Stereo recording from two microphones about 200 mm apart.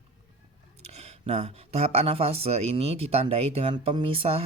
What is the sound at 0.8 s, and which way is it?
Speech, 30° right (ahead or behind).